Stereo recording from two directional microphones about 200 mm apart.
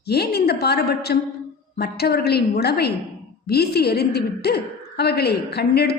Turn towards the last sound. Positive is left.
turn(degrees=55)  # may be behind; listen again after turning